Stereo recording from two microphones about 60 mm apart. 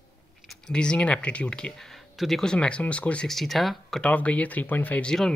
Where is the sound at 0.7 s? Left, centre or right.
Centre.